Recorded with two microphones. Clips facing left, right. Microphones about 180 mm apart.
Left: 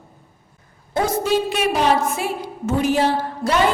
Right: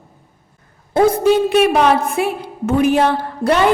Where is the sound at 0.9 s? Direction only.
55° right (ahead or behind).